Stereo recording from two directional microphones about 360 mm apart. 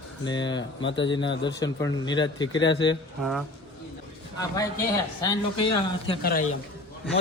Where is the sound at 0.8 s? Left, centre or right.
Left.